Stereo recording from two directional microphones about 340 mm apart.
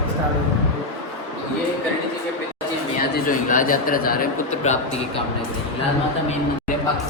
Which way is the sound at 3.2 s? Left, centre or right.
Left.